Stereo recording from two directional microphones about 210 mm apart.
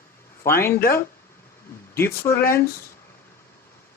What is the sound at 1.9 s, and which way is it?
Speech, 10° left (ahead or behind).